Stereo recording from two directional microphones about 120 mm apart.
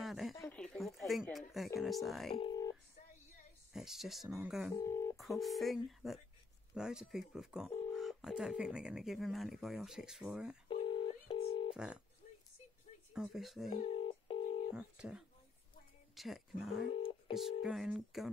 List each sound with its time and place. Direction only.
0.0 s a sound: centre (ahead or behind)
0.5 s speech: 5° left (ahead or behind)
2.5 s telephone dialing: 30° left (ahead or behind)
3.7 s speech: 5° right (ahead or behind)
4.7 s speech: 20° left (ahead or behind)
5.1 s speech: centre (ahead or behind)
10.7 s telephone dialing: 45° left (ahead or behind)
11.7 s speech: 10° right (ahead or behind)
13.1 s speech: 5° right (ahead or behind)
13.8 s telephone dialing: 50° left (ahead or behind)
14.7 s speech: 10° right (ahead or behind)